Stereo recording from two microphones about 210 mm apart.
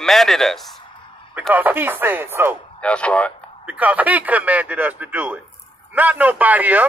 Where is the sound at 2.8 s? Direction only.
5° left (ahead or behind).